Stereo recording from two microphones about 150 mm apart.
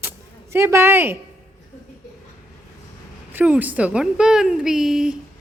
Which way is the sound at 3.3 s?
10° right (ahead or behind).